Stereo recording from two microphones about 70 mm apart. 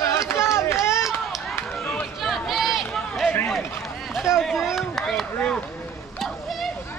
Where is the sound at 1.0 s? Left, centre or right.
Centre.